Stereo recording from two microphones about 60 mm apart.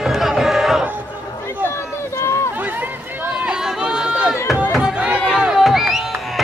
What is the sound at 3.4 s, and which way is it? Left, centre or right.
Run, centre.